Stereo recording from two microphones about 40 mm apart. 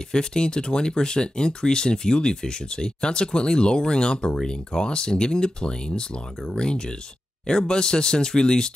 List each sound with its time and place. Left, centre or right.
0.1 s speech: centre